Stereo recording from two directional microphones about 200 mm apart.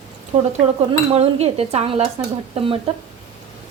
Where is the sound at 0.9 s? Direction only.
30° right (ahead or behind).